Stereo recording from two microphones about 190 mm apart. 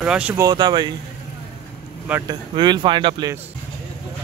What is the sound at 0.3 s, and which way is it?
Speech, 20° right (ahead or behind).